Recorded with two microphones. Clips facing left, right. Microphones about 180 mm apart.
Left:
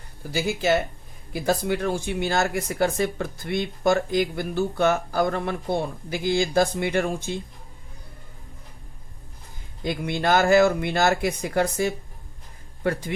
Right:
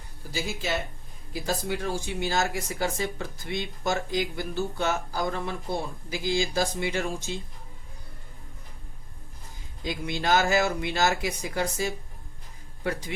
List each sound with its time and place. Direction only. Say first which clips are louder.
0.3 s speech: left 8 dB; 65° left (ahead or behind)
9.8 s speech: left 5 dB; 55° left (ahead or behind)